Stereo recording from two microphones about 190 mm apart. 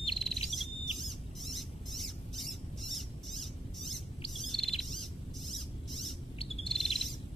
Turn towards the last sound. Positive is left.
turn(degrees=0)  # may be behind; listen again after turning